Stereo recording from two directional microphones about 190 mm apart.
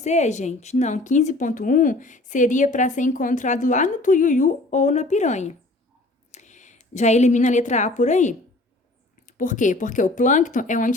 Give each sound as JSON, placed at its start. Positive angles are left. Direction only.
{"t": 0.0, "sound": "a woman's voice", "side_deg": 40}